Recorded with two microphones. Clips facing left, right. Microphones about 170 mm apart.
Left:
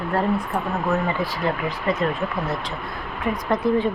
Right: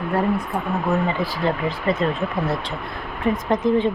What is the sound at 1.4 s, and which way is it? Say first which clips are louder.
Speech: right 2 dB; 30° right (ahead or behind).